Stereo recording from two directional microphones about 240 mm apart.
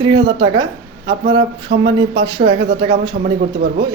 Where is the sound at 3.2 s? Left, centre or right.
Right.